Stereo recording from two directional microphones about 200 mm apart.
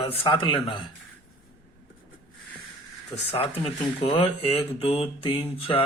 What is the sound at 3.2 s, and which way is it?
Speech, 30° left (ahead or behind).